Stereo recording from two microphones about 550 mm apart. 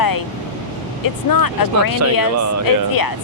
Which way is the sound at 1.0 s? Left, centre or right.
Left.